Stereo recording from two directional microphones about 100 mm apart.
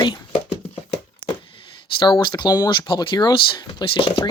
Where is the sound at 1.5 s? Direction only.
55° left (ahead or behind).